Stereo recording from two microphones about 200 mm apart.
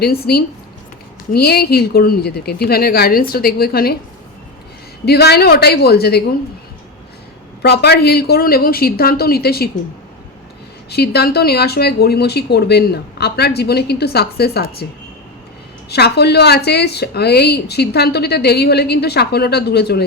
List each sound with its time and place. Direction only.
0.0 s speech: 50° left (ahead or behind)
5.0 s speech: 55° left (ahead or behind)
7.6 s speech: 55° left (ahead or behind)
10.8 s speech: 55° left (ahead or behind)
15.9 s speech: 55° left (ahead or behind)